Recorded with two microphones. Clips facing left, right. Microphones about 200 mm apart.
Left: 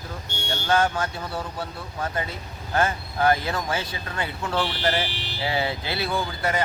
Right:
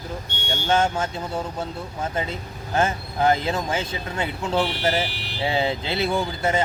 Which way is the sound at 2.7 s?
25° right (ahead or behind).